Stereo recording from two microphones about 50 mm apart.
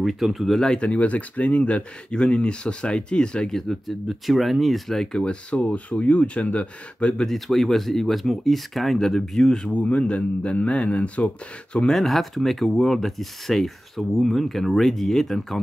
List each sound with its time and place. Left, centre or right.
0.0 s speech: centre
0.7 s speech: left; by 5.2 s centre
5.2 s speech: left
7.2 s speech: centre
9.6 s speech: left
11.9 s speech: centre